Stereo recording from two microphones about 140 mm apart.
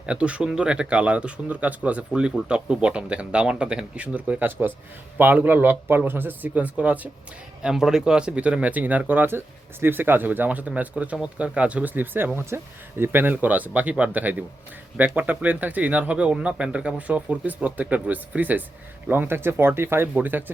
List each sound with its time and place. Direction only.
0.0 s speech: 10° right (ahead or behind)